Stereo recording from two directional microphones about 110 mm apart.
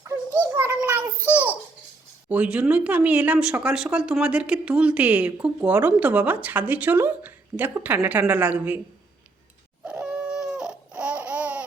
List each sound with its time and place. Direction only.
0.0 s a sound: 25° right (ahead or behind)
2.3 s speech: 10° right (ahead or behind)
9.8 s babbling: 10° right (ahead or behind)